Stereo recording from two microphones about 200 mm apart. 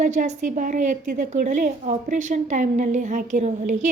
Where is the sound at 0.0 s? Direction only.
40° right (ahead or behind).